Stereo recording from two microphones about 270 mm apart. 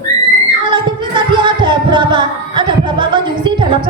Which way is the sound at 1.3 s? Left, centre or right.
Centre.